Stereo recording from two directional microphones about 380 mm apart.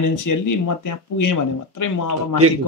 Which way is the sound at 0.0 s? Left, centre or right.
Left.